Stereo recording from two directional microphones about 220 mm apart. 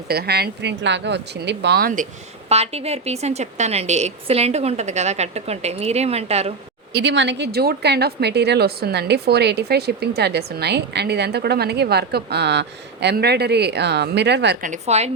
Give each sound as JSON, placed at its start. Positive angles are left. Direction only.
{"t": 0.1, "sound": "a woman's voice", "side_deg": -45}
{"t": 2.5, "sound": "a woman's voice", "side_deg": -30}
{"t": 6.9, "sound": "a woman's voice", "side_deg": -50}
{"t": 14.7, "sound": "a woman's voice", "side_deg": -30}